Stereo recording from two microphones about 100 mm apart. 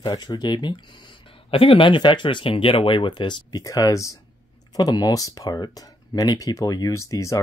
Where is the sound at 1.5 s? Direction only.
65° left (ahead or behind); by 3.6 s 50° left (ahead or behind).